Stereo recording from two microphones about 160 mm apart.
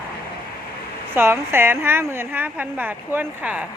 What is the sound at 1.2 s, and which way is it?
A woman's voice, 15° right (ahead or behind).